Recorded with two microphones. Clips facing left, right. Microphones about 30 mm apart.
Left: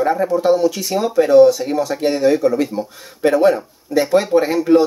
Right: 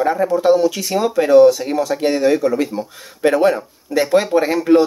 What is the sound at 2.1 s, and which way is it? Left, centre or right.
Speech, right.